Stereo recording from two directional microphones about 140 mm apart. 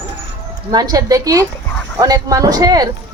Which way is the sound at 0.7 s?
25° right (ahead or behind).